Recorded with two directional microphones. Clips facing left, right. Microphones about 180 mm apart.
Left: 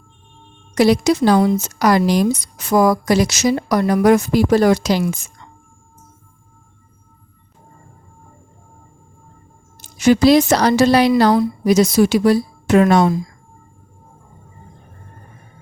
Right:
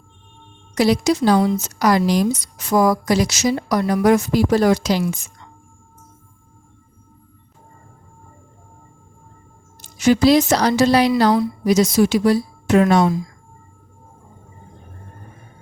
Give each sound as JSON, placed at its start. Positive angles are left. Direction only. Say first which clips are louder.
{"t": 0.8, "sound": "speech", "louder": "left 3 dB", "side_deg": 60}
{"t": 10.0, "sound": "speech", "louder": "left 2 dB", "side_deg": 60}